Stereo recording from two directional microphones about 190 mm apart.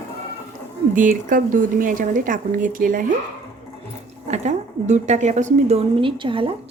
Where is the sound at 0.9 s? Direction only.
45° right (ahead or behind).